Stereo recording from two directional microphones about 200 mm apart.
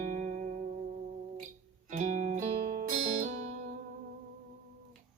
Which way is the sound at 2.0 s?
40° right (ahead or behind).